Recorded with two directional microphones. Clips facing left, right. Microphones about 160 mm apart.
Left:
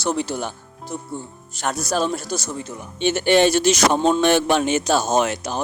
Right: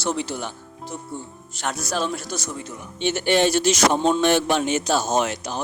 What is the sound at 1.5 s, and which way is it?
Speech, 40° left (ahead or behind).